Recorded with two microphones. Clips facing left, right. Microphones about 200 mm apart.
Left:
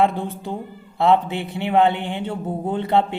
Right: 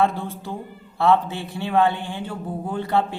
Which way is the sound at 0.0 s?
15° left (ahead or behind).